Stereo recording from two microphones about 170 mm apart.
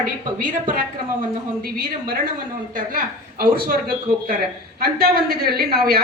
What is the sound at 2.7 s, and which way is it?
A woman's voice, 55° right (ahead or behind).